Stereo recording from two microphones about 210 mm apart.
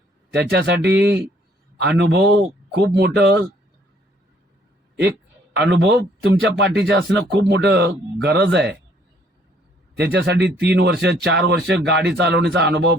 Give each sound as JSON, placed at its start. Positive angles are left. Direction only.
{"t": 0.3, "sound": "speech", "side_deg": -55}
{"t": 5.5, "sound": "speech", "side_deg": -55}
{"t": 10.0, "sound": "speech", "side_deg": -50}